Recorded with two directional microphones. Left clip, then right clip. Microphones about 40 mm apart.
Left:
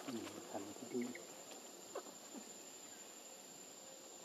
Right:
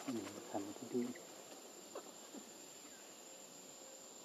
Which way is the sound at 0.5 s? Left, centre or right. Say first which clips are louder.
Right 4 dB; centre.